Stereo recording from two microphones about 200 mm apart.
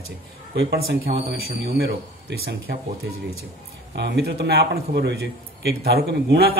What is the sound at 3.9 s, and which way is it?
Speech, 60° right (ahead or behind).